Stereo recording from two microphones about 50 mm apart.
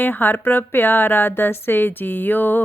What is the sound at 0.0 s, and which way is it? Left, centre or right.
A woman's voice, left.